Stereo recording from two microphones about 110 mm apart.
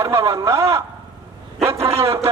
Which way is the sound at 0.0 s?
25° right (ahead or behind).